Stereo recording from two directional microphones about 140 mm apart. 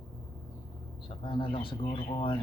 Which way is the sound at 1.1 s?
35° left (ahead or behind).